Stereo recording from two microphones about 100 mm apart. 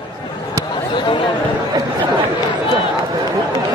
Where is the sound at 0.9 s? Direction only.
55° left (ahead or behind).